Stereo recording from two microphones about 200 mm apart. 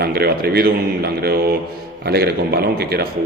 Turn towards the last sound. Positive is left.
turn(degrees=-50)  # may be behind; listen again after turning